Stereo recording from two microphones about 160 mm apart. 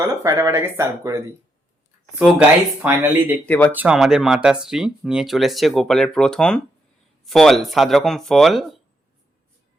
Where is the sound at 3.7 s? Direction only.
5° right (ahead or behind).